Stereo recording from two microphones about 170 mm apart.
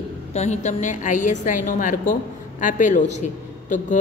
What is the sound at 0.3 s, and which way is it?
A man's voice, 40° left (ahead or behind).